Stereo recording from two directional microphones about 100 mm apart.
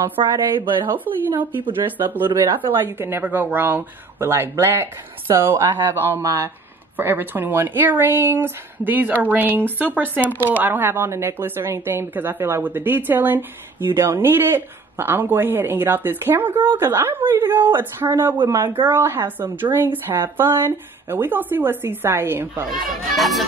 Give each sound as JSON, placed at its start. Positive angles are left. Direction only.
{"t": 0.2, "sound": "speech", "side_deg": -55}
{"t": 0.8, "sound": "speech", "side_deg": -20}
{"t": 6.1, "sound": "speech", "side_deg": -25}
{"t": 22.7, "sound": "speech", "side_deg": 0}